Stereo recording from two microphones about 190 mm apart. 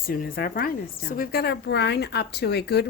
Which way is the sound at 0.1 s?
50° left (ahead or behind).